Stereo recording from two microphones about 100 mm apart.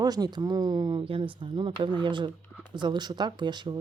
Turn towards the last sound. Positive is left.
turn(degrees=-45)  # may be behind; listen again after turning